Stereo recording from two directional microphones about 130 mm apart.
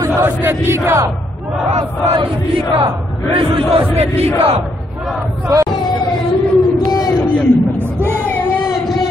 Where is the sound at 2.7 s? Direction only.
45° right (ahead or behind).